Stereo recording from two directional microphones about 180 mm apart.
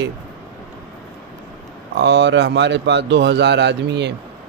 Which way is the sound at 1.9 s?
75° right (ahead or behind).